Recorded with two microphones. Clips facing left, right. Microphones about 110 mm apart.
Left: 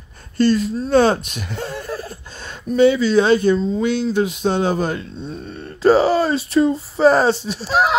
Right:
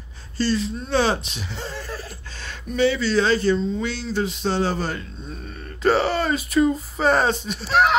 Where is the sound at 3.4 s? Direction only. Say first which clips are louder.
Left 4 dB; 50° left (ahead or behind).